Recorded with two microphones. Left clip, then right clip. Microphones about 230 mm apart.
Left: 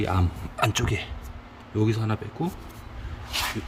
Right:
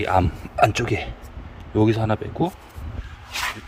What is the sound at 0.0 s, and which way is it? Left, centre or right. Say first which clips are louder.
A man's voice: right 8 dB; centre.